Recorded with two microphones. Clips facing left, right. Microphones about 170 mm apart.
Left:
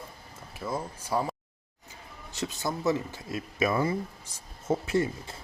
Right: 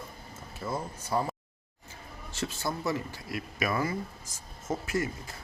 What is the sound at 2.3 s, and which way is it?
Speech, 20° left (ahead or behind).